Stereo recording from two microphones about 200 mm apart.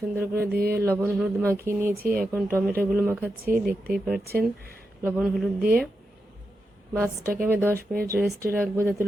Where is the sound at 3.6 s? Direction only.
45° right (ahead or behind).